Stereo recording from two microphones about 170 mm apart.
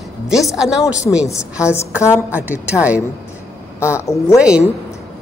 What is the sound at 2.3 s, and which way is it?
Speech, 10° right (ahead or behind).